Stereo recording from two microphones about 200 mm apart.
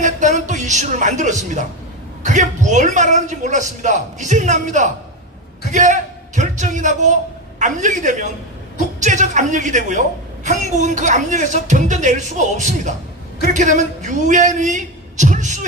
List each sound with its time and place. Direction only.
0.0 s a woman's voice: 40° right (ahead or behind)